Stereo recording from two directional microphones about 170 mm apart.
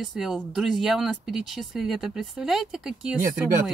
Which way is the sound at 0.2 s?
Centre (ahead or behind).